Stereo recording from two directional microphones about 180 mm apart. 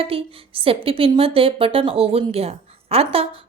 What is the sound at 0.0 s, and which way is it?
A woman's voice, 30° right (ahead or behind).